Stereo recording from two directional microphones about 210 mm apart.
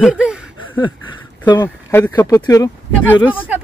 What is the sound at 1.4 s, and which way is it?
Speech, 20° left (ahead or behind).